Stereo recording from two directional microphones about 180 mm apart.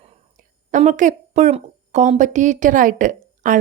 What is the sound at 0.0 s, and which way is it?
Speech, 40° right (ahead or behind).